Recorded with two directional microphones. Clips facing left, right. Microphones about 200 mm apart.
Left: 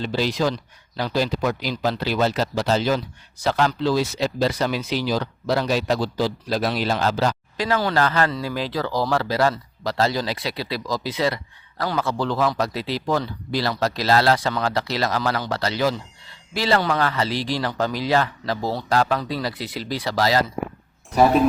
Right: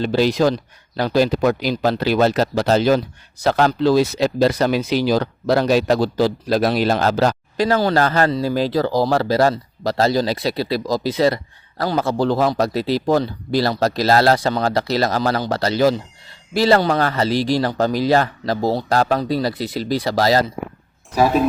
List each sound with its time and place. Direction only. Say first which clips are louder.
0.0 s speech: right 6 dB; 55° right (ahead or behind)
21.1 s speech: even; centre (ahead or behind)